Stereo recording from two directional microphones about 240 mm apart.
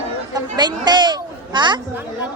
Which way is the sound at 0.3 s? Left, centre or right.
Centre.